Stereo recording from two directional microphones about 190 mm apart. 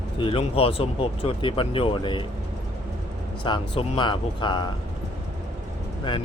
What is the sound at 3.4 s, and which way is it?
Speech, 25° left (ahead or behind).